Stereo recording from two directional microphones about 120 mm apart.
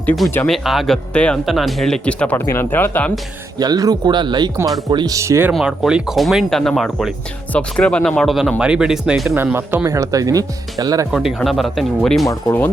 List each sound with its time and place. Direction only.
0.4 s speech: centre (ahead or behind); by 3.1 s 15° left (ahead or behind)
3.6 s speech: 30° right (ahead or behind)
5.5 s speech: 5° right (ahead or behind)
9.3 s speech: 20° right (ahead or behind)
11.1 s speech: 5° right (ahead or behind)